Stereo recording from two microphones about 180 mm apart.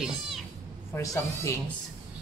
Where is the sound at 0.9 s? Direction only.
15° left (ahead or behind).